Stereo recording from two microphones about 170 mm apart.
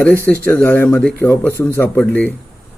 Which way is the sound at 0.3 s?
10° left (ahead or behind).